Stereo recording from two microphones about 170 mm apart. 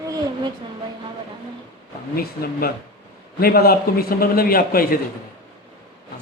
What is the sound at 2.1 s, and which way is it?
A man's voice, 65° left (ahead or behind).